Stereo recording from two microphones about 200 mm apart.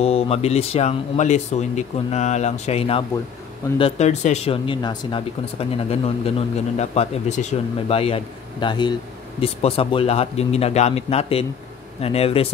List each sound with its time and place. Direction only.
0.0 s speech: 30° left (ahead or behind)